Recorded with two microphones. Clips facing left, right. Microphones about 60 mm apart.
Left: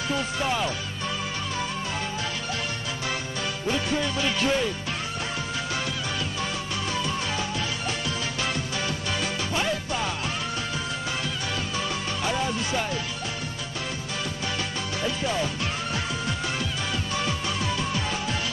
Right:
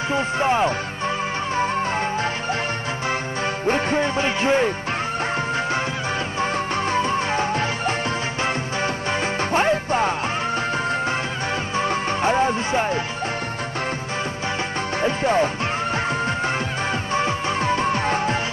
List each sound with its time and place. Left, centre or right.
0.1 s music: right
3.6 s music: right
6.4 s music: right
11.7 s music: right
15.0 s music: right